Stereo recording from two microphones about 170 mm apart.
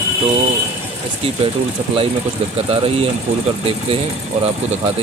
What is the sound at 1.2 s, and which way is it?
Speech, 35° right (ahead or behind).